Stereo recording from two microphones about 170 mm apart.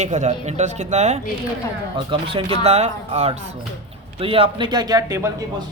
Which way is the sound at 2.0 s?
30° right (ahead or behind).